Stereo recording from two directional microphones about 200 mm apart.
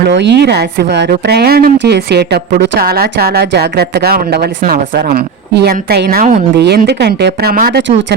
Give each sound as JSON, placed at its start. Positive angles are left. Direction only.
{"t": 0.0, "sound": "a woman's voice", "side_deg": -60}